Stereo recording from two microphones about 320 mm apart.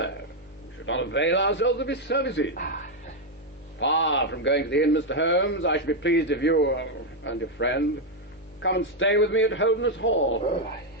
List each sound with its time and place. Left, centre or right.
0.9 s a man's voice: left
3.8 s a man's voice: left